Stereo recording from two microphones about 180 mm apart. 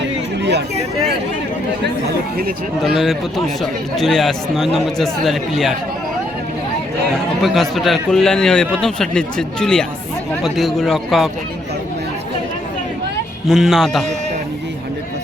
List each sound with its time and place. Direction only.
2.9 s speech: centre (ahead or behind)
7.4 s speech: centre (ahead or behind)
13.5 s speech: centre (ahead or behind)